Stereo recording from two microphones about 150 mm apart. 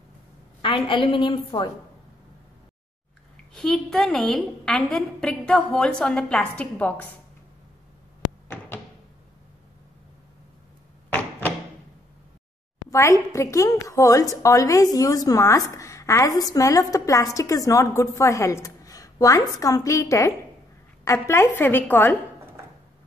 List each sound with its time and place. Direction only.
0.6 s a woman's voice: 35° left (ahead or behind)
3.5 s a woman's voice: centre (ahead or behind)
11.1 s a sound: 15° left (ahead or behind)
12.9 s a woman's voice: 20° left (ahead or behind)